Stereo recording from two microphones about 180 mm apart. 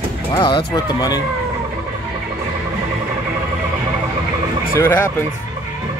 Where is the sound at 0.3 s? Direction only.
25° left (ahead or behind).